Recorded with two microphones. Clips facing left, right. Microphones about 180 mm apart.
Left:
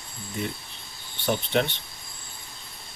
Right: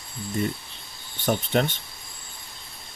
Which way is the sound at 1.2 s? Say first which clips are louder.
Right 1 dB; 45° right (ahead or behind).